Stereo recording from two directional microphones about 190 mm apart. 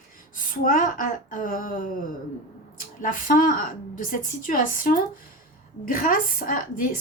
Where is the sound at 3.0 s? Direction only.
45° left (ahead or behind).